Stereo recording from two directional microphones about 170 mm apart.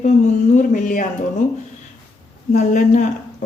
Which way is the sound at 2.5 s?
45° left (ahead or behind).